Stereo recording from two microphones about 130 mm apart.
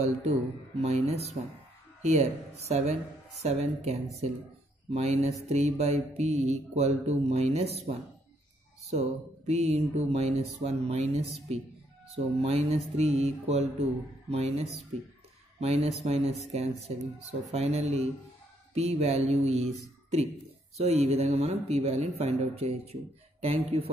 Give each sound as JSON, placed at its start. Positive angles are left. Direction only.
{"t": 0.0, "sound": "speech", "side_deg": -55}
{"t": 2.7, "sound": "speech", "side_deg": -55}
{"t": 9.5, "sound": "speech", "side_deg": -55}